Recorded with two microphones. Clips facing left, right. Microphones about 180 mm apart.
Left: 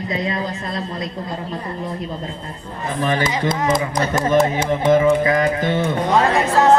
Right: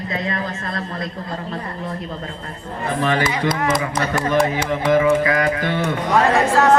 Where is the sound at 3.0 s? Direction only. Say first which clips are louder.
Even; 20° left (ahead or behind).